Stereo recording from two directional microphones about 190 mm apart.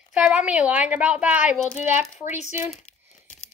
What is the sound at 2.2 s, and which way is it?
Speech, 35° left (ahead or behind).